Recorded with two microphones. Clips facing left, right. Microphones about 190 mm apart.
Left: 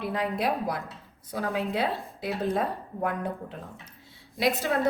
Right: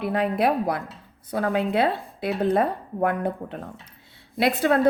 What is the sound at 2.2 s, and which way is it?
A woman's voice, 60° right (ahead or behind).